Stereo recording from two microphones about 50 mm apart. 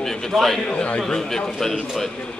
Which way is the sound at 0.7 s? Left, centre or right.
Left.